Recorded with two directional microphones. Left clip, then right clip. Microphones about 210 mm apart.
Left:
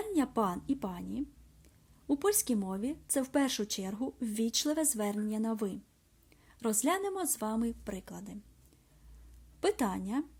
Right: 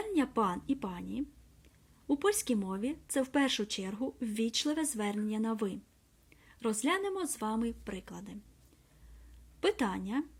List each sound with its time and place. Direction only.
0.0 s speech: 10° left (ahead or behind)
9.6 s speech: 10° left (ahead or behind)